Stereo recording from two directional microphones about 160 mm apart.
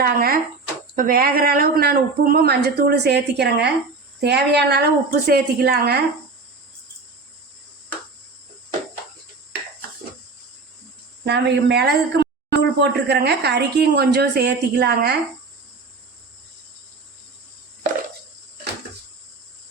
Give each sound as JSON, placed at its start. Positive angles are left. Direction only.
{"t": 0.0, "sound": "a woman's voice", "side_deg": -65}
{"t": 11.3, "sound": "a woman's voice", "side_deg": -90}